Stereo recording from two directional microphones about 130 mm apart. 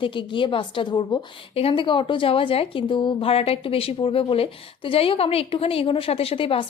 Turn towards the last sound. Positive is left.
turn(degrees=45)  # may be behind; listen again after turning